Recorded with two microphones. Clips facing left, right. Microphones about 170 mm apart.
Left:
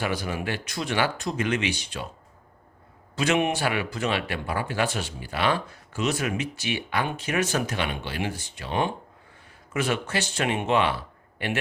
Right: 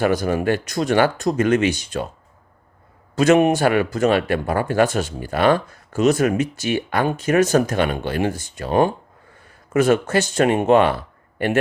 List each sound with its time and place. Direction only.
0.0 s speech: 45° right (ahead or behind)
3.2 s speech: 45° right (ahead or behind)